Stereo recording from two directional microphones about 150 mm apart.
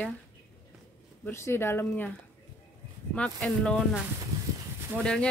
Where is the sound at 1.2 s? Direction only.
15° left (ahead or behind).